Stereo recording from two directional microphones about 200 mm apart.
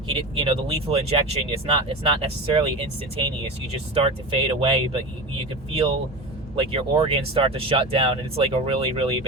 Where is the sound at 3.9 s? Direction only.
30° right (ahead or behind).